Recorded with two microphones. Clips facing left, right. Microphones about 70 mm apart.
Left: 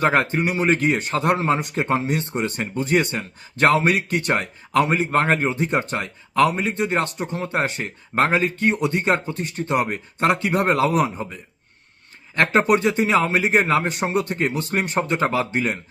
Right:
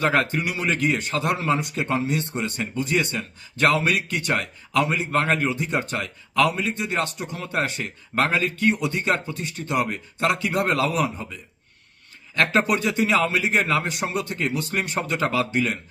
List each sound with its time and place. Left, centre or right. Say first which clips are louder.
0.0 s a man's voice: left 3 dB; left
12.4 s a man's voice: left 3 dB; left